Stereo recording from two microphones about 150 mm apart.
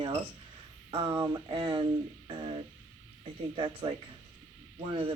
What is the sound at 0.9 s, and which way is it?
Speech, 35° right (ahead or behind).